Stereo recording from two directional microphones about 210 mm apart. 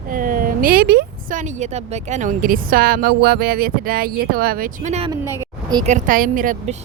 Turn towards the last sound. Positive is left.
turn(degrees=-40)  # may be behind; listen again after turning